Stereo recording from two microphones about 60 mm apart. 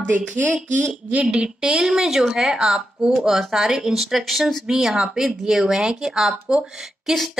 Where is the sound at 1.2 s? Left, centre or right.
Centre.